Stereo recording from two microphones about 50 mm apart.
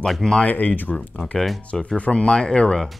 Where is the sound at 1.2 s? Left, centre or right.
Centre.